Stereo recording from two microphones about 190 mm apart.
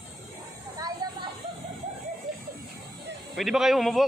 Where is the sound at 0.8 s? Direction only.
20° right (ahead or behind).